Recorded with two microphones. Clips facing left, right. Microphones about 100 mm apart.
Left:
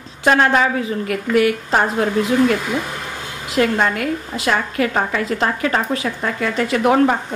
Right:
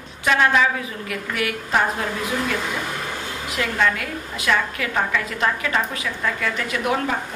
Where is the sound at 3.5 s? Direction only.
40° left (ahead or behind).